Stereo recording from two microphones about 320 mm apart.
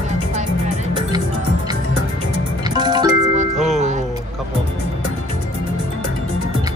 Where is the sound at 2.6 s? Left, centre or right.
Centre.